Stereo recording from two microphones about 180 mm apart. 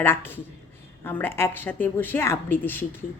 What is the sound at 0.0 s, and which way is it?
A woman's voice, 10° left (ahead or behind).